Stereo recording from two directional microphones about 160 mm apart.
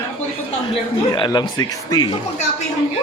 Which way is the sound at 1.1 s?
30° left (ahead or behind).